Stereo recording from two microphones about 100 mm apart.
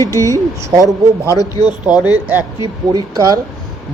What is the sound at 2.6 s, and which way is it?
Speech, 35° right (ahead or behind).